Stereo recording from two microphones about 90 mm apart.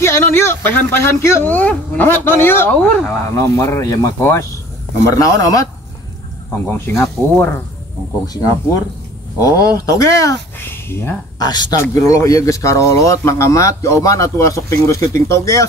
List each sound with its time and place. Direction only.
0.0 s speech: 30° left (ahead or behind)
1.5 s speech: 15° left (ahead or behind)
2.8 s speech: 5° left (ahead or behind)
3.3 s speech: 35° left (ahead or behind)
6.6 s speech: 25° left (ahead or behind)
9.4 s speech: 40° left (ahead or behind)
10.6 s speech: 25° left (ahead or behind)
11.3 s speech: 50° left (ahead or behind)
11.7 s speech: 35° left (ahead or behind)